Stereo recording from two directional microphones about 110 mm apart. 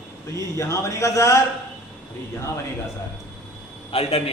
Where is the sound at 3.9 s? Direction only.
65° left (ahead or behind).